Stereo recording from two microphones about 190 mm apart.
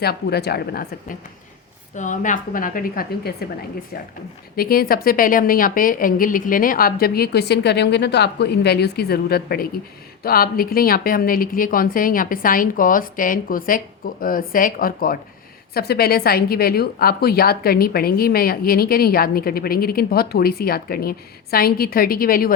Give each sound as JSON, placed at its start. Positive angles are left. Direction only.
{"t": 0.0, "sound": "speech", "side_deg": 55}
{"t": 2.0, "sound": "a woman's voice", "side_deg": 40}
{"t": 4.5, "sound": "a woman's voice", "side_deg": 50}